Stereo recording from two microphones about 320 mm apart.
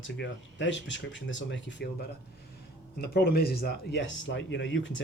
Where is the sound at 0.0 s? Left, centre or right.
Left.